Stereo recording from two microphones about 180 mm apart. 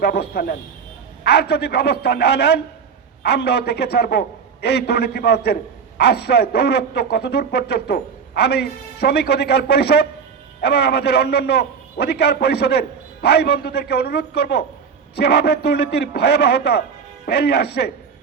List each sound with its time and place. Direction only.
0.0 s a man's voice: 60° left (ahead or behind)